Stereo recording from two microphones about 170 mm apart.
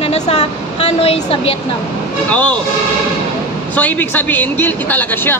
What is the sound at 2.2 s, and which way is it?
Speech, 10° left (ahead or behind).